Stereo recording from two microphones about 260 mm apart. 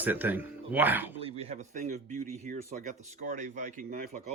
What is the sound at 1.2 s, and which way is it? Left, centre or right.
Speech, right.